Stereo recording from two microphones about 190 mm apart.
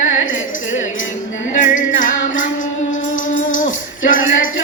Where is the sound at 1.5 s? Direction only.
40° left (ahead or behind).